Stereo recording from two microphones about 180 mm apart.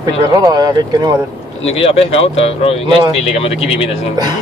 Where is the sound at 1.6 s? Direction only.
35° left (ahead or behind).